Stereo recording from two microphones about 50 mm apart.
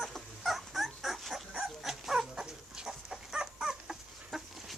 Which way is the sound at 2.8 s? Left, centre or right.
Centre.